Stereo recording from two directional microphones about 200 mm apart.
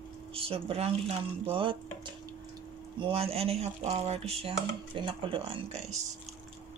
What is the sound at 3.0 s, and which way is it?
Speech, 30° right (ahead or behind).